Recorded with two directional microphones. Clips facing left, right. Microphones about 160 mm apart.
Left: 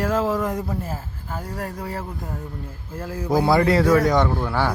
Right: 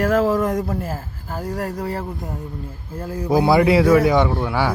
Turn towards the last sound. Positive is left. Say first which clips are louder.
# right 2 dB
turn(degrees=-10)  # may be behind; listen again after turning